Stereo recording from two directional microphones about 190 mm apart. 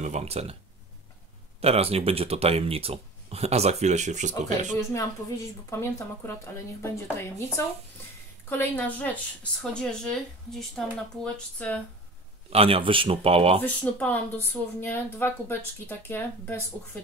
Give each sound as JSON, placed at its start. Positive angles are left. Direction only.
{"t": 0.0, "sound": "speech", "side_deg": -35}
{"t": 1.6, "sound": "speech", "side_deg": -30}
{"t": 5.7, "sound": "speech", "side_deg": 15}
{"t": 12.4, "sound": "speech", "side_deg": -30}
{"t": 13.6, "sound": "speech", "side_deg": 10}